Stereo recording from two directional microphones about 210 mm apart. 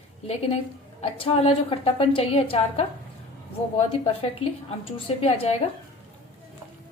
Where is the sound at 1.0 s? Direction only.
25° left (ahead or behind).